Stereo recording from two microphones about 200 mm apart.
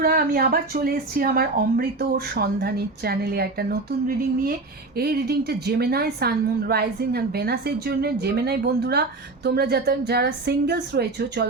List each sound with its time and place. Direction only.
0.0 s a woman's voice: 45° right (ahead or behind)